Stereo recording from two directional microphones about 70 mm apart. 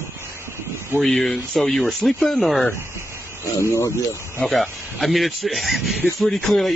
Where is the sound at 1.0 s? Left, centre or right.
Centre.